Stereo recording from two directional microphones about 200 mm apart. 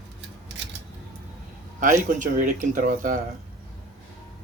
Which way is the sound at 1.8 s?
40° right (ahead or behind).